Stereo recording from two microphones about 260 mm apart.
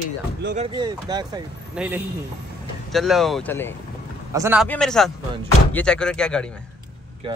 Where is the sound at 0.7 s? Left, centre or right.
Centre.